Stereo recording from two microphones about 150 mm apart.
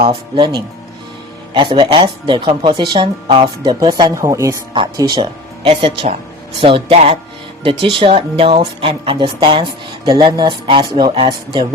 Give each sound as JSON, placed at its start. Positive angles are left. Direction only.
{"t": 0.0, "sound": "speech", "side_deg": -35}